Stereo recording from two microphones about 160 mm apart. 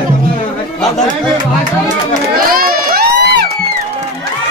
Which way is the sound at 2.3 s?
65° right (ahead or behind).